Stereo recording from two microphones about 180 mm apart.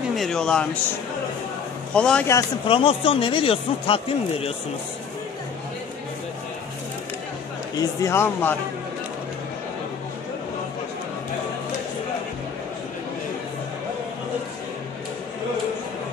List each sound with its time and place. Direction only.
0.1 s speech: centre (ahead or behind)
2.0 s a man's voice: 5° left (ahead or behind)
2.7 s speech: 30° left (ahead or behind)
7.8 s speech: 15° left (ahead or behind)